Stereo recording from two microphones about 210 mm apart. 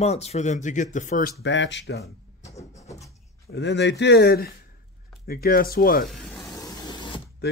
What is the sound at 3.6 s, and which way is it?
Speech, 55° left (ahead or behind).